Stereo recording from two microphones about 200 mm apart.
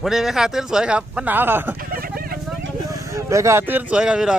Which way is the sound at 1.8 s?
45° right (ahead or behind).